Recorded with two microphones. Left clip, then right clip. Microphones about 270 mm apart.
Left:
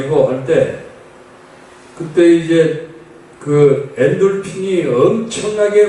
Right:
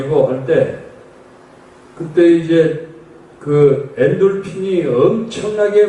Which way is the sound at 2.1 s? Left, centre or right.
Centre.